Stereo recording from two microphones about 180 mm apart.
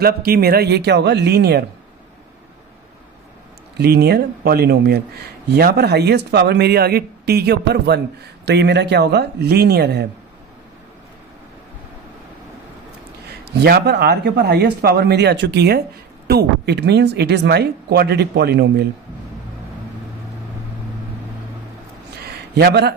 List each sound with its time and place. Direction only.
0.0 s speech: 60° right (ahead or behind)
3.8 s speech: 65° right (ahead or behind)
13.4 s speech: 65° right (ahead or behind)
22.3 s a sound: 65° right (ahead or behind)